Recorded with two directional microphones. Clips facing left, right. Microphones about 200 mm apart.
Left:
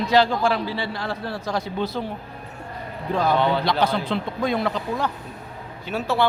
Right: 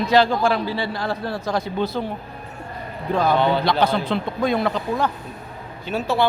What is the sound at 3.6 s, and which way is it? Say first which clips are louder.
A woman's voice: right 2 dB; 55° right (ahead or behind).